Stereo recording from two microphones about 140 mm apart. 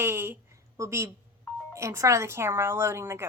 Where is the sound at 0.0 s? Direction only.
15° right (ahead or behind).